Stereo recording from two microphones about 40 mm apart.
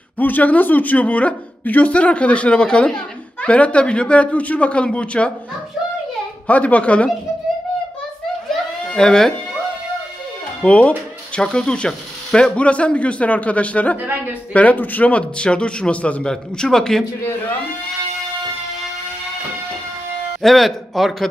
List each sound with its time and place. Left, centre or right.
0.2 s a woman's voice: left
6.4 s a woman's voice: left
8.9 s speech: centre
10.6 s speech: left
11.4 s a woman's voice: left
16.3 s speech: centre
20.4 s speech: centre